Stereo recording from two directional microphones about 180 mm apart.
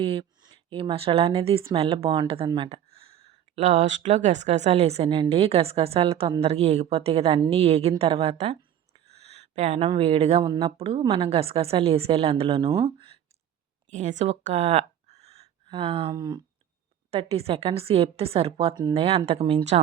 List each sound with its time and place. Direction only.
0.0 s a woman's voice: 30° right (ahead or behind)
2.5 s a sound: 30° right (ahead or behind)
3.5 s a woman's voice: 40° right (ahead or behind)
9.0 s a sound: 35° right (ahead or behind)
9.6 s a woman's voice: 35° right (ahead or behind)
10.4 s speech: 20° right (ahead or behind)
10.8 s a woman's voice: 30° right (ahead or behind)
13.9 s speech: 40° right (ahead or behind); by 16.4 s 20° right (ahead or behind)
17.1 s a woman's voice: 35° right (ahead or behind)
19.0 s a woman's voice: 35° right (ahead or behind)